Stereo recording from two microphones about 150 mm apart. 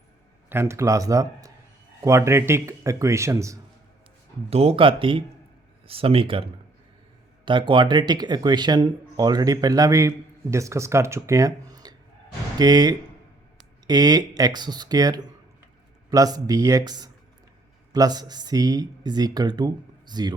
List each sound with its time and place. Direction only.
0.5 s speech: 15° right (ahead or behind)
4.4 s speech: 40° right (ahead or behind)